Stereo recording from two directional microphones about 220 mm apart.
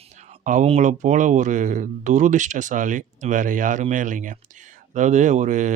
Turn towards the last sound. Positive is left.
turn(degrees=-35)  # may be behind; listen again after turning